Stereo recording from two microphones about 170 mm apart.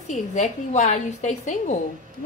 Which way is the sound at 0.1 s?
45° left (ahead or behind).